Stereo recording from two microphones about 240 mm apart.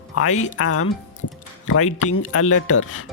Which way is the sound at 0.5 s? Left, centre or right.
Left.